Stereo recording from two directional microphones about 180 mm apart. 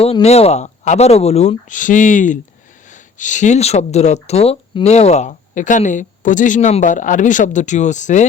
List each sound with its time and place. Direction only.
0.0 s speech: 35° left (ahead or behind)